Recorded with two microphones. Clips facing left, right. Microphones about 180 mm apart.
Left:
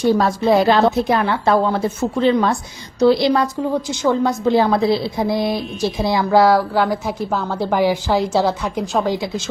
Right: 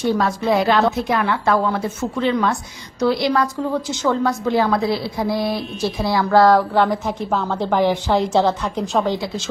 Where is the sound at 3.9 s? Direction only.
15° left (ahead or behind).